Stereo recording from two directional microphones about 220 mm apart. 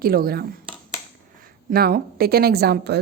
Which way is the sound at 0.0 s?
40° right (ahead or behind).